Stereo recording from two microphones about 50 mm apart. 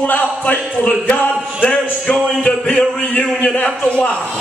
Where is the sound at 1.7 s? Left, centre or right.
Centre.